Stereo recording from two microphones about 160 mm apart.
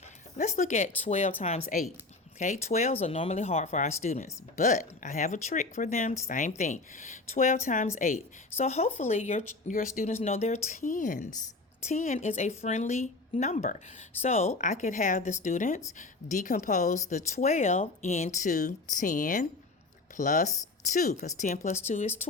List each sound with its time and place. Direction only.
0.3 s speech: 50° left (ahead or behind)